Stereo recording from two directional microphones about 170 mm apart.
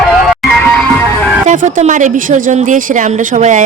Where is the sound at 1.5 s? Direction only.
50° right (ahead or behind).